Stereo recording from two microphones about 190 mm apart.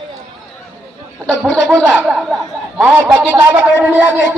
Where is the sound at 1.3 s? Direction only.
Centre (ahead or behind).